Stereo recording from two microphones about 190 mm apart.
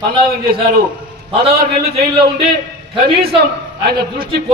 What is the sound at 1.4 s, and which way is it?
Speech, 30° right (ahead or behind).